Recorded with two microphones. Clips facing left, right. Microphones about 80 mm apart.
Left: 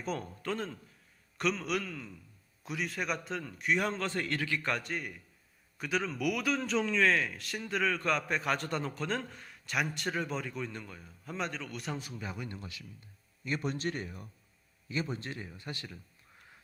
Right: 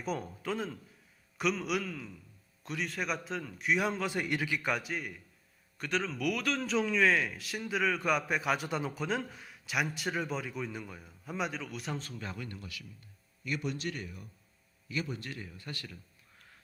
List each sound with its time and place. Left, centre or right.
0.0 s a man's voice: centre
11.9 s speech: centre